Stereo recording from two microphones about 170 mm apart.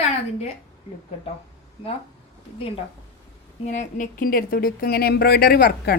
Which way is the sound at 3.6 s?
45° left (ahead or behind).